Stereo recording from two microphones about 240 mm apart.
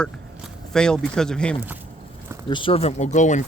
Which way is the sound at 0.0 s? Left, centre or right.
Centre.